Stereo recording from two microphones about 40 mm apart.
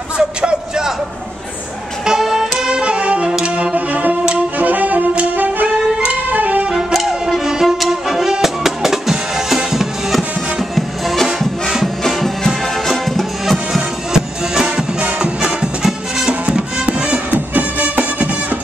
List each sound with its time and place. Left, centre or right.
0.2 s a sound: centre
2.0 s music: centre
3.7 s music: right
6.3 s vehicle: right
7.1 s music: centre
13.7 s music: centre
17.1 s music: right